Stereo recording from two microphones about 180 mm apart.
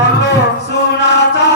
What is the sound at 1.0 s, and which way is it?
Chant, 70° left (ahead or behind).